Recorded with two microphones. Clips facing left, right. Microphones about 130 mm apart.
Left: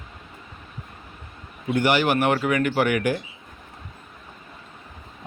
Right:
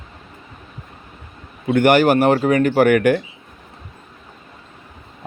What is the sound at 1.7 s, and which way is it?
Speech, 55° right (ahead or behind).